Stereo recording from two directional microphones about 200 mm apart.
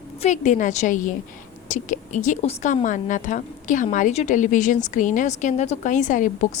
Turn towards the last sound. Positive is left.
turn(degrees=40)  # may be behind; listen again after turning